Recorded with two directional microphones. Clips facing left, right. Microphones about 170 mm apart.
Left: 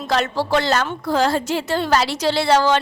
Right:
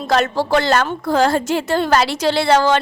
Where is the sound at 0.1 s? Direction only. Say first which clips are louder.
Right 3 dB; 50° right (ahead or behind).